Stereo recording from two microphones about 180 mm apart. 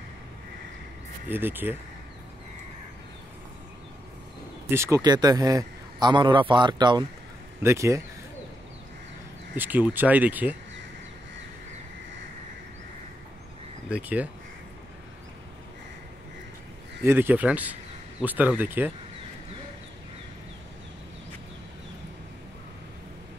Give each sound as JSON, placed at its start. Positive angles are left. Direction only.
{"t": 1.3, "sound": "speech", "side_deg": -10}
{"t": 4.6, "sound": "a man's voice", "side_deg": -15}
{"t": 9.6, "sound": "speech", "side_deg": -10}
{"t": 13.8, "sound": "speech", "side_deg": -5}
{"t": 17.0, "sound": "speech", "side_deg": -10}